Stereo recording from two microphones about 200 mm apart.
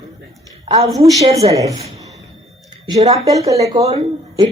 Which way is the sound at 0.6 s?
30° right (ahead or behind).